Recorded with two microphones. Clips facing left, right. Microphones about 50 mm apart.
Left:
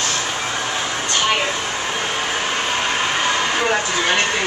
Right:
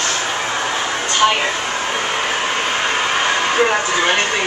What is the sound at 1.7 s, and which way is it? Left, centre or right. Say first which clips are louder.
Vehicle: right 3 dB; right.